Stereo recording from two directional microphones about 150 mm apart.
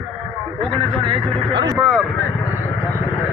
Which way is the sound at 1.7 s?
5° right (ahead or behind).